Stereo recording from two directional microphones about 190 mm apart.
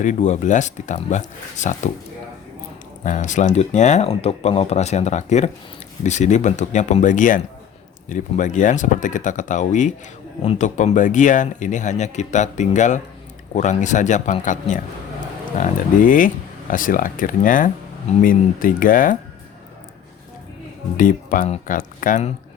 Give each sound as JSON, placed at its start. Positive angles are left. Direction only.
{"t": 0.0, "sound": "speech", "side_deg": 40}
{"t": 3.0, "sound": "speech", "side_deg": 40}
{"t": 20.9, "sound": "speech", "side_deg": 45}